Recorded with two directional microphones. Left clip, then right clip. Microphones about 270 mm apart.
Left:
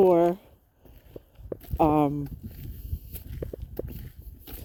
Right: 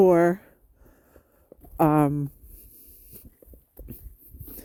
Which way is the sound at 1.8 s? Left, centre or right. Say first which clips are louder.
Right 1 dB; right.